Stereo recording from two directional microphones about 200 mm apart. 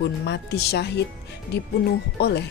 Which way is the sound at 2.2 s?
55° left (ahead or behind).